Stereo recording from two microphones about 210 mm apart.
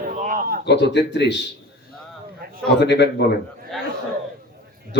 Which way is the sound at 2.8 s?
55° left (ahead or behind).